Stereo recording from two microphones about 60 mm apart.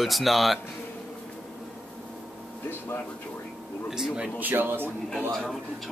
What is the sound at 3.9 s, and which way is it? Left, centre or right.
Speech, centre.